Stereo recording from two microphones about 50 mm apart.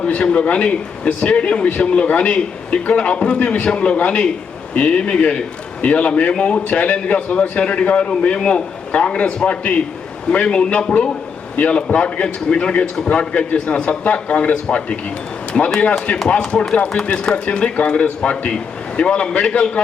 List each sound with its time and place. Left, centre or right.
0.0 s a man's voice: left
15.5 s a man's voice: centre